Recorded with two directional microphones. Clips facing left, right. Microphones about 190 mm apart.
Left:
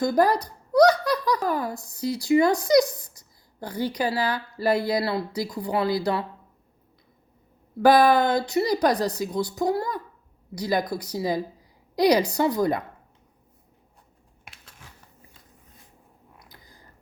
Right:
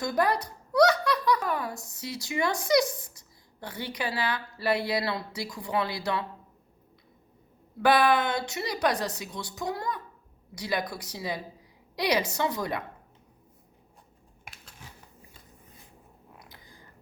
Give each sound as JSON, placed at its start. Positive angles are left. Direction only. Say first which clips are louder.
{"t": 0.0, "sound": "speech", "louder": "left 6 dB", "side_deg": 35}
{"t": 7.8, "sound": "speech", "louder": "left 5 dB", "side_deg": 40}